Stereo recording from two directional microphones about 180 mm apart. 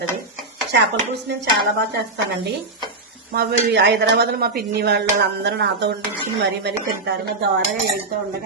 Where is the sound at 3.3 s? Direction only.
60° right (ahead or behind).